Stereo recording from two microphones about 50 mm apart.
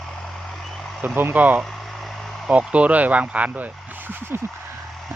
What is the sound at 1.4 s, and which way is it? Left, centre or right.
Speech, right.